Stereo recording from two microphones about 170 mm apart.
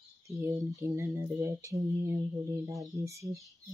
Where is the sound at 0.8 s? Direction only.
15° right (ahead or behind).